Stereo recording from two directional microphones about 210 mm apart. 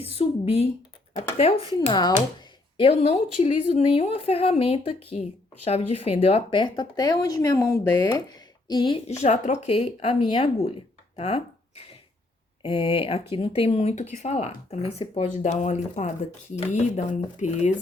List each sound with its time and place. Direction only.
0.0 s speech: 30° left (ahead or behind)
9.2 s speech: 35° left (ahead or behind)
12.6 s speech: 25° left (ahead or behind)